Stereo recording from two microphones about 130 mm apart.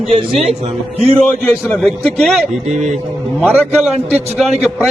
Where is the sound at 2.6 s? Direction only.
60° right (ahead or behind).